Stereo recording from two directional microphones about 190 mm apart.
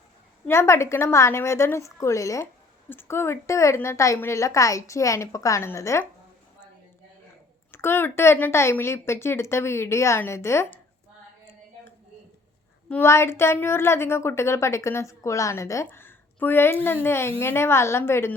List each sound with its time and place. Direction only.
0.4 s a woman's voice: 15° left (ahead or behind)
7.7 s a woman's voice: 10° left (ahead or behind)
12.9 s a woman's voice: 15° left (ahead or behind)